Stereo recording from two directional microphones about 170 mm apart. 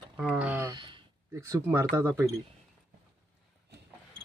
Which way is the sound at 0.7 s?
30° right (ahead or behind).